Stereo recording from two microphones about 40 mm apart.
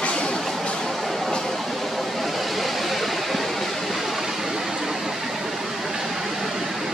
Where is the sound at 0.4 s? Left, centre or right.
Centre.